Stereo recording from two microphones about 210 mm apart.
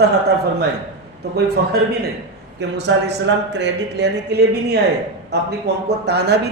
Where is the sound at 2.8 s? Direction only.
55° right (ahead or behind).